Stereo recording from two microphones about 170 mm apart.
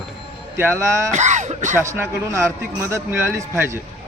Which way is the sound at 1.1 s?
45° right (ahead or behind).